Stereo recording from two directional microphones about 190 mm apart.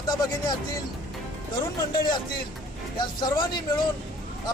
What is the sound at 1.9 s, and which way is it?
Speech, 25° left (ahead or behind).